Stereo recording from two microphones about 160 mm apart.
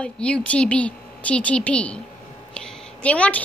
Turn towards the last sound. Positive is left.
turn(degrees=10)  # may be behind; listen again after turning